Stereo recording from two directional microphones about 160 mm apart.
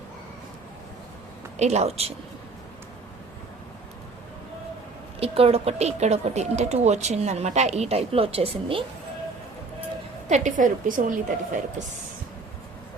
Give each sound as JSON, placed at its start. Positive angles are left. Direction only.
{"t": 1.5, "sound": "a woman's voice", "side_deg": -45}
{"t": 5.2, "sound": "a woman's voice", "side_deg": -40}
{"t": 10.2, "sound": "a woman's voice", "side_deg": -50}